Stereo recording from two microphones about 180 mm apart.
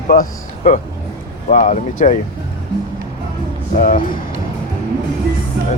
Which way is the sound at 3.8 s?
50° left (ahead or behind).